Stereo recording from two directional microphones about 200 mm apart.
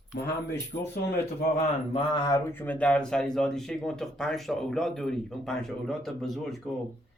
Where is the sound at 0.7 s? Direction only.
50° left (ahead or behind).